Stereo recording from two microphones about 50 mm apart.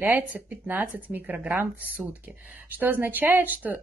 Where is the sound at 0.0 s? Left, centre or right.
Right.